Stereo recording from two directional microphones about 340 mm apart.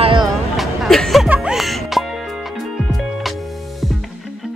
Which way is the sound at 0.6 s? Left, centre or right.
Centre.